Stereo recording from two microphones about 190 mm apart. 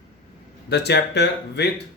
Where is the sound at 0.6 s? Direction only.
60° left (ahead or behind).